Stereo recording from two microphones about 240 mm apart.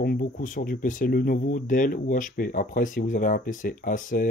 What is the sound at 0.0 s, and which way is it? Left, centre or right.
Speech, left.